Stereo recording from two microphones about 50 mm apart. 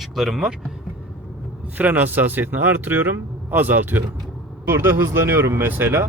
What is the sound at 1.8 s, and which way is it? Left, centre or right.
Speech, right.